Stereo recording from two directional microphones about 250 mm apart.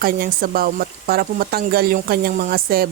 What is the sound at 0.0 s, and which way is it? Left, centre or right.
Speech, right.